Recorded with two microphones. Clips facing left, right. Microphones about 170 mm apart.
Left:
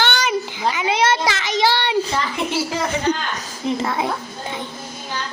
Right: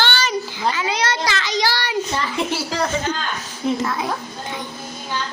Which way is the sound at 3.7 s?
25° left (ahead or behind).